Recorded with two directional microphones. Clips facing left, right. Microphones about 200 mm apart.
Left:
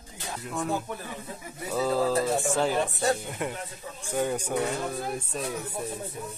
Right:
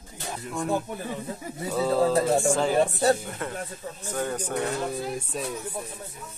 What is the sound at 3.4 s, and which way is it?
Speech, 15° left (ahead or behind).